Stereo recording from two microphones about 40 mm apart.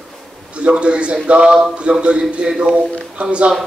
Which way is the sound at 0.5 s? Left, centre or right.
Right.